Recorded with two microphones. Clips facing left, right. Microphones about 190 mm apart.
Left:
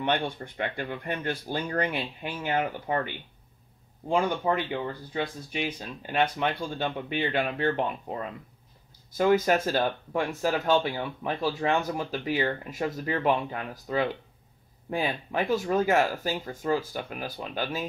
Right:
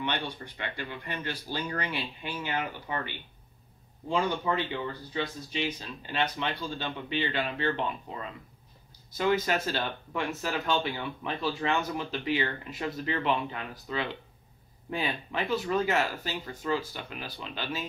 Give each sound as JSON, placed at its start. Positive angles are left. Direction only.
{"t": 0.0, "sound": "speech", "side_deg": 50}
{"t": 4.4, "sound": "speech", "side_deg": 50}